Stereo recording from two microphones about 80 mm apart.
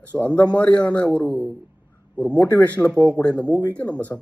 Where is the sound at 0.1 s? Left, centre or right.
Left.